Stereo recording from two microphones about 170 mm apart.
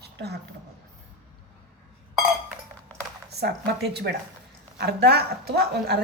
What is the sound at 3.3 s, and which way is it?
A woman's voice, 75° right (ahead or behind).